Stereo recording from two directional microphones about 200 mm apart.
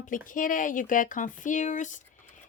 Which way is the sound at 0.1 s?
40° left (ahead or behind).